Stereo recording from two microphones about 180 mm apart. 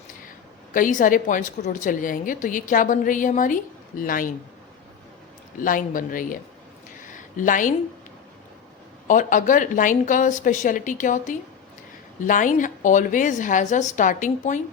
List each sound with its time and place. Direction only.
0.7 s a woman's voice: 50° left (ahead or behind)
5.5 s a woman's voice: 50° left (ahead or behind)
7.0 s a sound: 45° left (ahead or behind)
9.0 s a woman's voice: 45° left (ahead or behind)